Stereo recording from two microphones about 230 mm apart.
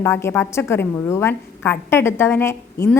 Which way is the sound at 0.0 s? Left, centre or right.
Centre.